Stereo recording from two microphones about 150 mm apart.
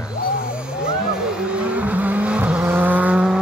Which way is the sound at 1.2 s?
5° right (ahead or behind).